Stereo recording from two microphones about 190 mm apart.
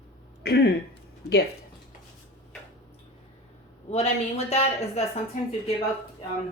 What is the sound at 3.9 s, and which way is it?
Speech, 35° left (ahead or behind).